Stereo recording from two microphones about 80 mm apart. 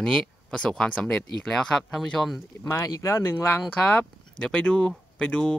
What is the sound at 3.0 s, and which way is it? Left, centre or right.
Speech, left.